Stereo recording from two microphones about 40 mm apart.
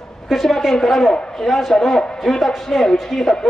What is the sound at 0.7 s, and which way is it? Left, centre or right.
A man's voice, centre.